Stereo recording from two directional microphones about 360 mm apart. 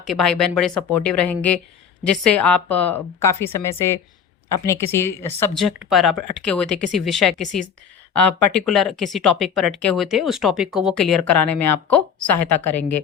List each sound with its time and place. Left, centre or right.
0.0 s speech: centre
12.5 s a woman's voice: left